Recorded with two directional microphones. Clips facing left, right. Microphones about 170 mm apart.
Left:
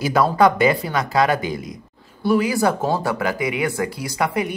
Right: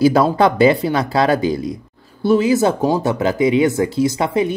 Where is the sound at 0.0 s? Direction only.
30° right (ahead or behind).